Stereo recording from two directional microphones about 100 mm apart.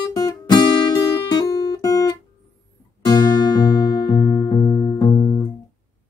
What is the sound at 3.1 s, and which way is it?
Music, 45° left (ahead or behind).